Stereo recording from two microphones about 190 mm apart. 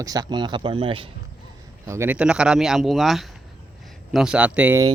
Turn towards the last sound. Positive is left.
turn(degrees=-5)  # may be behind; listen again after turning